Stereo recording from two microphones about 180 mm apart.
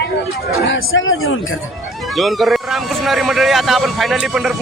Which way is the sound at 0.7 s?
90° left.